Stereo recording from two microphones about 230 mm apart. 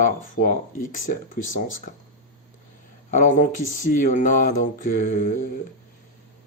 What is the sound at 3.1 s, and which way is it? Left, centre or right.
Speech, left.